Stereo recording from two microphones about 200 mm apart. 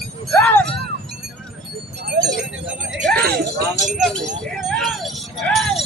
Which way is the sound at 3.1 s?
45° right (ahead or behind).